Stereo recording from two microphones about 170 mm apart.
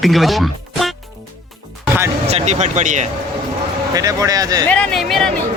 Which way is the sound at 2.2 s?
40° right (ahead or behind).